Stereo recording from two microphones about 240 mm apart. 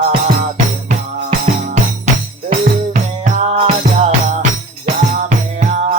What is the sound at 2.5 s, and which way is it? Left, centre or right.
Music, right.